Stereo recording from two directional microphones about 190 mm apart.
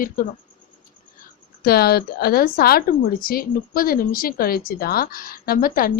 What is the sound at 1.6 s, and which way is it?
A woman's voice, 55° left (ahead or behind).